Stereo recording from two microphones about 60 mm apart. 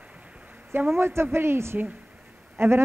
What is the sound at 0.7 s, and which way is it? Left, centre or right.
Speech, right.